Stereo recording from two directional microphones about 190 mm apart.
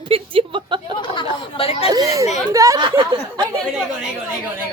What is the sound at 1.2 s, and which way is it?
Speech, 30° left (ahead or behind).